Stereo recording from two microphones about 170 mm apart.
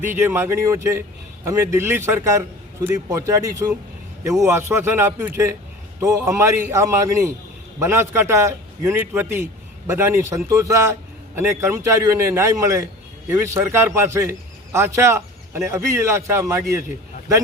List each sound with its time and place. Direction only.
0.1 s a man's voice: 15° right (ahead or behind)